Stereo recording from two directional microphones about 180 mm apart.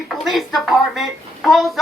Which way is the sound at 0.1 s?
Centre (ahead or behind).